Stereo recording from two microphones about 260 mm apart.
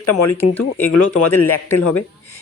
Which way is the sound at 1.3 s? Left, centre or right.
Centre.